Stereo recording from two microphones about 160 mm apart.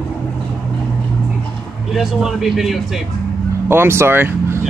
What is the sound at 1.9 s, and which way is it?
Speech, centre (ahead or behind).